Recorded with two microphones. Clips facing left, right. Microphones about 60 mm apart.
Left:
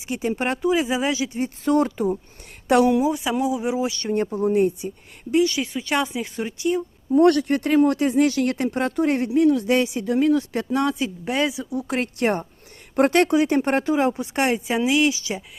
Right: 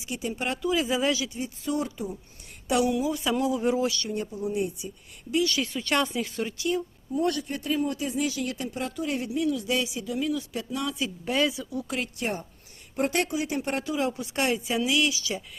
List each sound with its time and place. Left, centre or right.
0.1 s speech: left
1.6 s speech: left
2.6 s speech: left
3.1 s speech: centre
4.0 s speech: left
5.3 s speech: left
6.2 s speech: left
7.1 s speech: left
10.9 s speech: left